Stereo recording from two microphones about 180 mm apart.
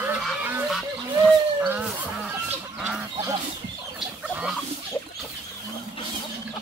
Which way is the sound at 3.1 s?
20° right (ahead or behind).